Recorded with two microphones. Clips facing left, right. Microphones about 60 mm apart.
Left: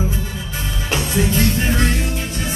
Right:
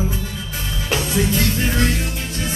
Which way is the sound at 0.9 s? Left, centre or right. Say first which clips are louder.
Even; centre.